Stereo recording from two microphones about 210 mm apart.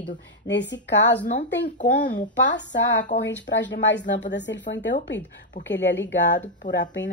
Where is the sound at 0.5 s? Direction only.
55° left (ahead or behind).